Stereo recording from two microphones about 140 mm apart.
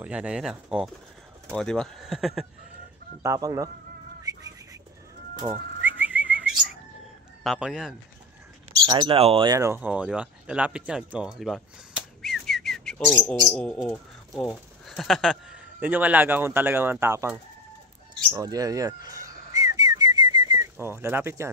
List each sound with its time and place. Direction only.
0.0 s speech: 10° right (ahead or behind)
3.2 s speech: 20° right (ahead or behind)
4.2 s bird: 25° right (ahead or behind)
5.5 s whistling: 10° right (ahead or behind)
7.4 s speech: 5° right (ahead or behind)
8.8 s speech: 35° right (ahead or behind)
9.5 s speech: 20° right (ahead or behind)
9.8 s speech: 10° right (ahead or behind)
11.1 s whistling: centre (ahead or behind)
13.5 s speech: 5° left (ahead or behind); by 17.3 s 20° right (ahead or behind)
18.3 s whistling: 25° right (ahead or behind)